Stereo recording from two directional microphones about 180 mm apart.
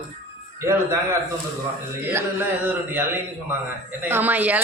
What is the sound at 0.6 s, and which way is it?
Speech, 15° right (ahead or behind).